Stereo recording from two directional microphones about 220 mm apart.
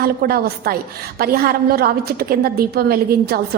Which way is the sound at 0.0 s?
45° right (ahead or behind).